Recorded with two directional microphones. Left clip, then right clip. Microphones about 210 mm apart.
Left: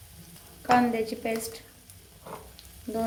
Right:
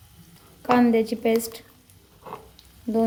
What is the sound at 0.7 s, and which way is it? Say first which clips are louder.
Speech: right 3 dB; 40° right (ahead or behind).